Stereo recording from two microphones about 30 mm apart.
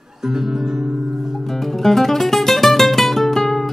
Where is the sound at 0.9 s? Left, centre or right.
Centre.